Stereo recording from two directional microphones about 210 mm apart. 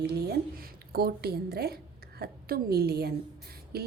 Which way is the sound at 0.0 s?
50° right (ahead or behind).